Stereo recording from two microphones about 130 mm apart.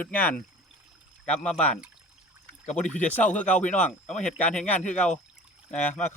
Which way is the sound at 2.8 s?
10° left (ahead or behind).